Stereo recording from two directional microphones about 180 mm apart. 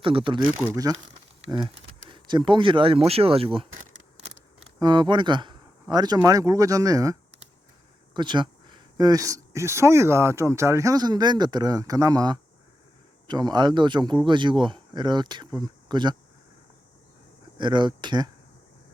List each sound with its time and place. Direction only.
0.0 s speech: 30° right (ahead or behind)
4.8 s speech: 25° right (ahead or behind)
17.6 s speech: 25° right (ahead or behind)